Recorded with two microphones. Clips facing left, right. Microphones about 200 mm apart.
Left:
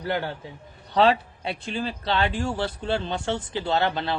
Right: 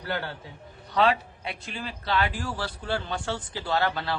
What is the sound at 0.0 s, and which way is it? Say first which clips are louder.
Speech: left 5 dB; 15° left (ahead or behind).